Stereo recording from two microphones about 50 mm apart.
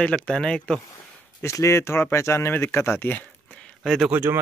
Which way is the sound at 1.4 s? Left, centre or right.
Left.